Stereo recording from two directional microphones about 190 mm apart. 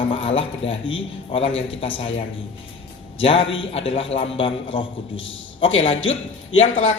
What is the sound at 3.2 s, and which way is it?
Speech, 30° left (ahead or behind).